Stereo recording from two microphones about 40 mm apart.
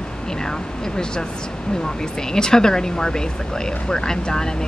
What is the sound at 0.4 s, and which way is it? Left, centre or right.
Speech, centre.